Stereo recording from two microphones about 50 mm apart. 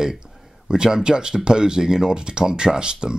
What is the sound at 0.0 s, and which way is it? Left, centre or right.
Speech, centre.